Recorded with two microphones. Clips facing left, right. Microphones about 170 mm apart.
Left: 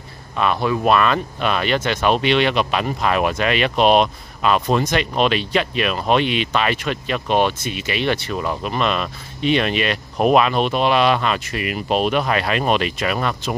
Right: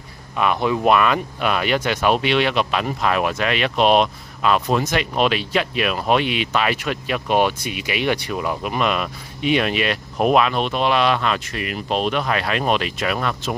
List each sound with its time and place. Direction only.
0.4 s speech: 15° right (ahead or behind); by 13.6 s centre (ahead or behind)